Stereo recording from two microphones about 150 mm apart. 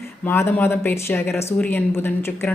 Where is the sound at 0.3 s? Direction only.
15° left (ahead or behind).